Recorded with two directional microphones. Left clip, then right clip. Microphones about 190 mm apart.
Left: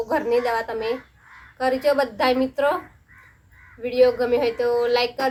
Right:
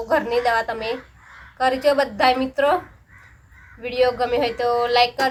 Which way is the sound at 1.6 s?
20° left (ahead or behind).